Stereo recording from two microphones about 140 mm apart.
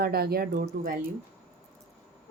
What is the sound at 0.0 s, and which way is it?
Speech, 90° right.